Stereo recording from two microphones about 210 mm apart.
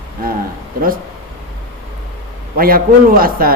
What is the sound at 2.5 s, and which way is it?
A man's voice, 45° right (ahead or behind).